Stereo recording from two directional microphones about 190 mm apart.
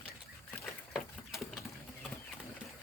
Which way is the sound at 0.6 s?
Centre (ahead or behind).